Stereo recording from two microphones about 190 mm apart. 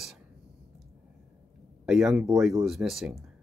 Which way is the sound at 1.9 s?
Centre (ahead or behind).